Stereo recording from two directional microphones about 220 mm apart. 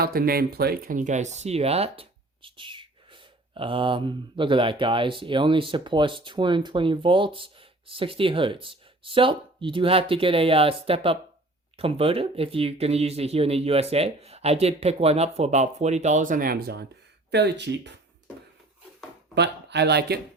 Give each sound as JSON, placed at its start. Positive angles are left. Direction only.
{"t": 0.0, "sound": "speech", "side_deg": -45}
{"t": 19.3, "sound": "speech", "side_deg": -50}